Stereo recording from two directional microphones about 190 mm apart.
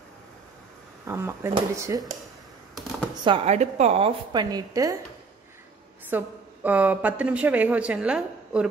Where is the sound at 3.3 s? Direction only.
30° right (ahead or behind).